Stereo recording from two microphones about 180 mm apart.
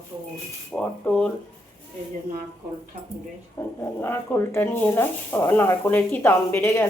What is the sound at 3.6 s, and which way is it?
Speech, 15° left (ahead or behind).